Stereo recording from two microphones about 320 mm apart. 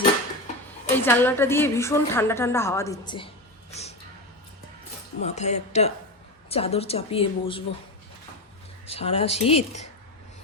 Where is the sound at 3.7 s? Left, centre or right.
Centre.